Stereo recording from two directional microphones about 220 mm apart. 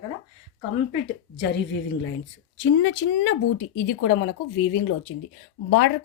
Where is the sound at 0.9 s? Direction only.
50° left (ahead or behind).